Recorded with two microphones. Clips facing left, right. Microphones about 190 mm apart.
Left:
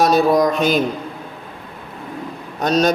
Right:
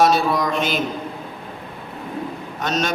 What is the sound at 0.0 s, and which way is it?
Mantra, 40° left (ahead or behind).